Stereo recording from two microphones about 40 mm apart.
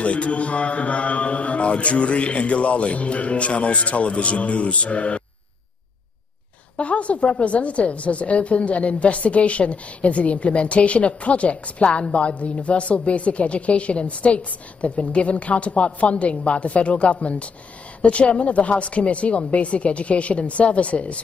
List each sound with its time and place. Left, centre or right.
0.0 s a woman's voice: left
6.8 s a woman's voice: left